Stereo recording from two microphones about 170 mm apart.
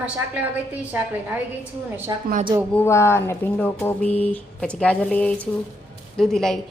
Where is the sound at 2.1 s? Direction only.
25° right (ahead or behind).